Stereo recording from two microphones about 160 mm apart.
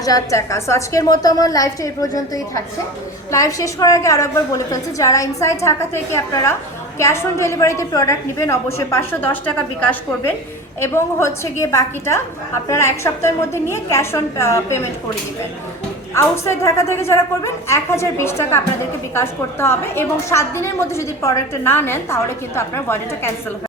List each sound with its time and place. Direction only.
0.0 s a woman's voice: 20° left (ahead or behind)
16.1 s a woman's voice: 15° left (ahead or behind)